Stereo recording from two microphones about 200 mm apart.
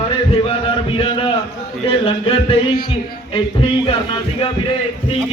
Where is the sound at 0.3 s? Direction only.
30° left (ahead or behind).